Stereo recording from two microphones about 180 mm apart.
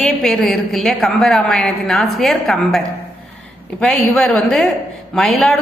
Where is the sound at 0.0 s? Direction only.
Centre (ahead or behind).